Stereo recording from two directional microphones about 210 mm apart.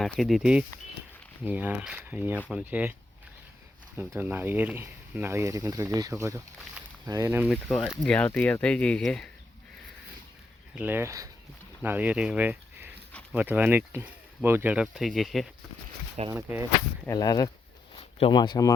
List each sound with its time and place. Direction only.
0.0 s speech: centre (ahead or behind)
4.1 s speech: 10° right (ahead or behind)
6.6 s a sound: 5° right (ahead or behind)
7.1 s speech: 15° right (ahead or behind)
7.5 s speech: 5° left (ahead or behind)
10.8 s speech: 10° right (ahead or behind)
16.3 s speech: 10° right (ahead or behind)
17.1 s speech: 20° left (ahead or behind)